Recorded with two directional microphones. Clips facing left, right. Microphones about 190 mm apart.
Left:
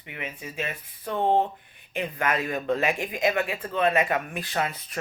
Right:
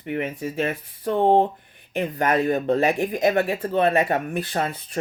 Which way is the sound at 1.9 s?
40° right (ahead or behind).